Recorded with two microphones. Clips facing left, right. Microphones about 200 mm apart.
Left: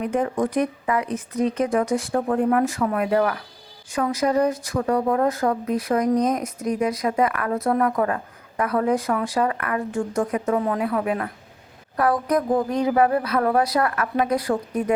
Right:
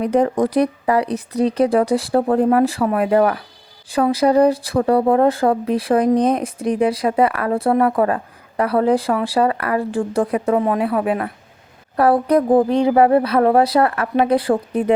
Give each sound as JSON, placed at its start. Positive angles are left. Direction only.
{"t": 0.0, "sound": "speech", "side_deg": -35}